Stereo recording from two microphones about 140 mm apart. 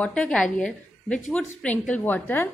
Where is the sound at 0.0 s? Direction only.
5° left (ahead or behind).